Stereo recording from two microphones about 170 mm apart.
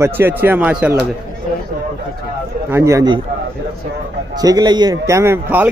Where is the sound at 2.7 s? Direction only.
15° right (ahead or behind).